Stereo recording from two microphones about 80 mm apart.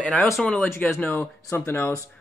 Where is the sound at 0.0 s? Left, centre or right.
Centre.